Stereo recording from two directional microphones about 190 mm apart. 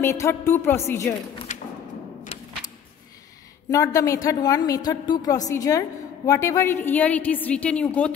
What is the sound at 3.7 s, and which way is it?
A woman's voice, 15° left (ahead or behind).